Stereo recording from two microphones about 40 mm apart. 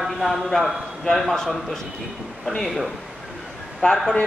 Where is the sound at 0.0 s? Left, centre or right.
Centre.